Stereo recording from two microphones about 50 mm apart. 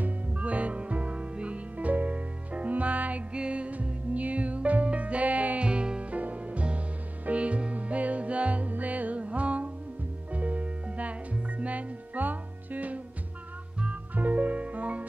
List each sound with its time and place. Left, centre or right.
0.0 s music: right
14.1 s music: right